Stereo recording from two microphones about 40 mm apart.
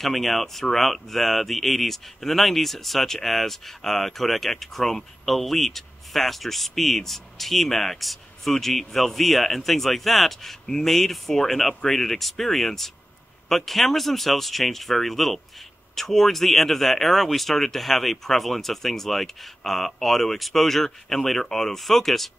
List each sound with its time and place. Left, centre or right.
0.0 s speech: centre